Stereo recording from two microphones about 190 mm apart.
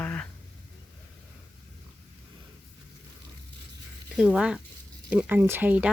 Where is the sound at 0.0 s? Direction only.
10° left (ahead or behind).